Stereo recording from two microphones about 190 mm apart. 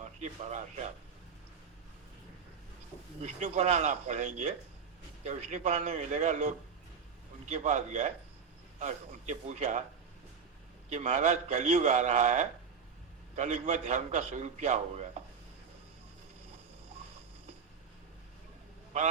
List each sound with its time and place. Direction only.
0.0 s speech: 35° right (ahead or behind)
3.2 s a man's voice: 35° right (ahead or behind)
10.8 s a man's voice: 35° right (ahead or behind)